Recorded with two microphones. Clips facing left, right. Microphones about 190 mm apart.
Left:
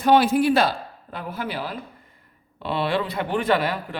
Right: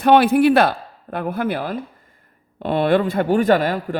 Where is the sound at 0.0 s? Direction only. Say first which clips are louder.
Right 4 dB; 60° right (ahead or behind).